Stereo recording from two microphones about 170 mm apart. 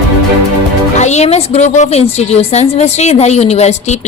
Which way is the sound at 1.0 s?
40° left (ahead or behind).